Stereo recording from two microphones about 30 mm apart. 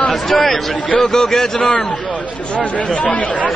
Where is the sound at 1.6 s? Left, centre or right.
Left.